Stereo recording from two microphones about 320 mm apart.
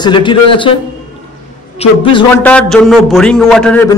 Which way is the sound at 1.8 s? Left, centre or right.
Centre.